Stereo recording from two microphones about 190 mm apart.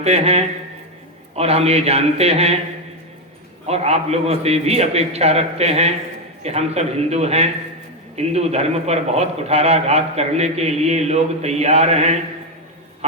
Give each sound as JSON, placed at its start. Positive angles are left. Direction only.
{"t": 0.0, "sound": "a man's voice", "side_deg": -35}
{"t": 3.7, "sound": "a man's voice", "side_deg": -35}